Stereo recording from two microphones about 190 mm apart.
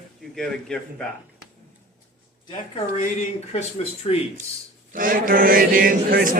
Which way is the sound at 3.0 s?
35° left (ahead or behind).